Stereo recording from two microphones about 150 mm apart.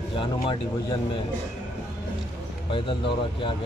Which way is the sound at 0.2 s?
35° left (ahead or behind).